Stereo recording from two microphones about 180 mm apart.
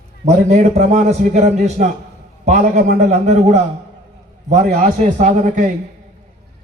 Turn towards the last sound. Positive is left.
turn(degrees=-45)  # may be behind; listen again after turning